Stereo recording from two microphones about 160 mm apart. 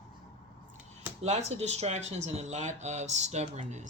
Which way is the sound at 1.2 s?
45° right (ahead or behind).